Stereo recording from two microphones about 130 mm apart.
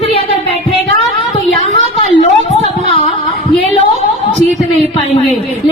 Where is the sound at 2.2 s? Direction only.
55° left (ahead or behind).